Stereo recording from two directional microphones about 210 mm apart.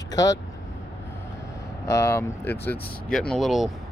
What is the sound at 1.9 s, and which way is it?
Speech, 15° left (ahead or behind).